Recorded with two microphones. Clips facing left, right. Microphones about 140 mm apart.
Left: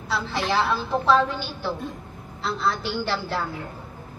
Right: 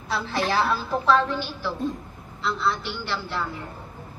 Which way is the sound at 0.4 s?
10° right (ahead or behind).